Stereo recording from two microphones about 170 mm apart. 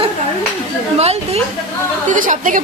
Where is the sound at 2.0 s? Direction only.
50° right (ahead or behind).